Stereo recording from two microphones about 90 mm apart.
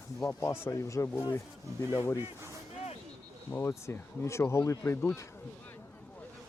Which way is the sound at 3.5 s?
25° left (ahead or behind).